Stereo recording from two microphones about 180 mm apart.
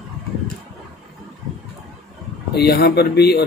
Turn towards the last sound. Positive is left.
turn(degrees=65)  # may be behind; listen again after turning